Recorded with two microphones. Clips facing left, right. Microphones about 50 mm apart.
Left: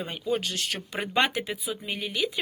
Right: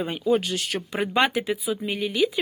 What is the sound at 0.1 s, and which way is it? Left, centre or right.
Speech, centre.